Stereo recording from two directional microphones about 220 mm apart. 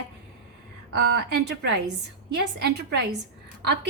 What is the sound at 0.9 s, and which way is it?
A woman's voice, 50° right (ahead or behind).